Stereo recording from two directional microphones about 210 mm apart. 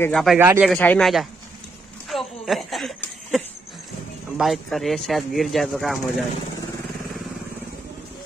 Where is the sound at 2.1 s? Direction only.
Centre (ahead or behind).